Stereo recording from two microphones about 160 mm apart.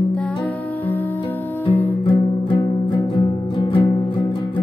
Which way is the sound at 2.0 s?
30° left (ahead or behind).